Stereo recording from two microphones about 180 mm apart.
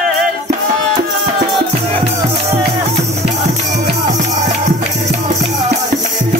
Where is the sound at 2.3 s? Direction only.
35° right (ahead or behind).